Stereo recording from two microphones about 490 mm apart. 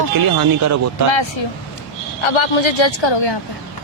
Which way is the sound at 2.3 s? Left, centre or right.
Left.